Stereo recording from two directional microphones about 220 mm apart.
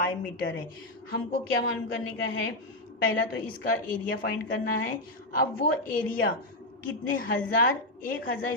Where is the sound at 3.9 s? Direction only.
40° left (ahead or behind).